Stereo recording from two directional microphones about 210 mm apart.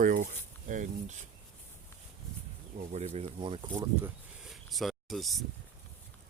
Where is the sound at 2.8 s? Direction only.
30° right (ahead or behind); by 4.1 s 15° right (ahead or behind).